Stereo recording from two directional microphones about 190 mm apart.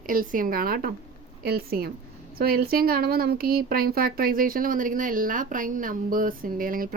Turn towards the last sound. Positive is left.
turn(degrees=-45)  # may be behind; listen again after turning